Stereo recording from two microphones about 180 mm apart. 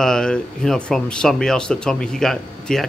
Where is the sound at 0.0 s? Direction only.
5° left (ahead or behind).